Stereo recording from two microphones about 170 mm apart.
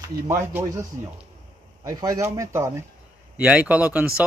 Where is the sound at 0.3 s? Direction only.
15° right (ahead or behind).